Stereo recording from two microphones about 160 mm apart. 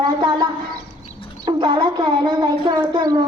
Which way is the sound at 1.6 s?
30° right (ahead or behind).